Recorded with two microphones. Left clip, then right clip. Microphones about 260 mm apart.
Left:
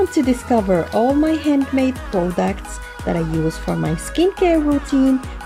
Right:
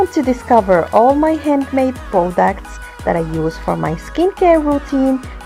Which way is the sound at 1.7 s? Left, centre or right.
Right.